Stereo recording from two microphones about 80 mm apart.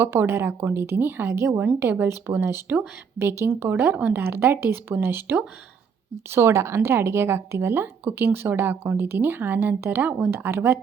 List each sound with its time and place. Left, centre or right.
0.0 s a woman's voice: right